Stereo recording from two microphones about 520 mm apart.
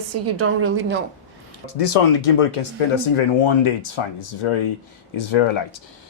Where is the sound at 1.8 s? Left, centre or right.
Left.